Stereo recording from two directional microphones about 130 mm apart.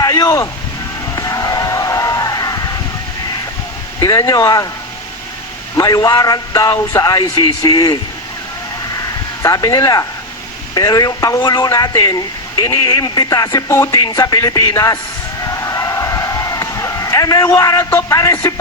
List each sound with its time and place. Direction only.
0.0 s a sound: 25° left (ahead or behind)
4.0 s a man's voice: 25° left (ahead or behind)
5.7 s a man's voice: 30° left (ahead or behind)
9.4 s a man's voice: 25° left (ahead or behind)
15.4 s a sound: 25° left (ahead or behind)
17.4 s a man's voice: 25° left (ahead or behind)